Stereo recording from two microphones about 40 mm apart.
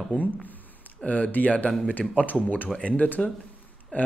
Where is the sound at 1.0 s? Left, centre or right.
Left.